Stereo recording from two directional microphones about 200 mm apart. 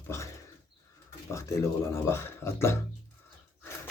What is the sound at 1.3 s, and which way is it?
Speech, 15° left (ahead or behind).